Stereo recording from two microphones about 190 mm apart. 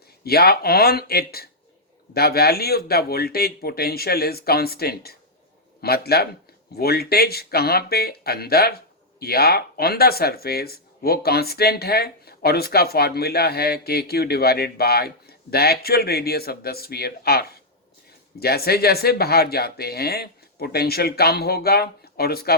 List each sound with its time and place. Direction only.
0.3 s speech: 55° left (ahead or behind)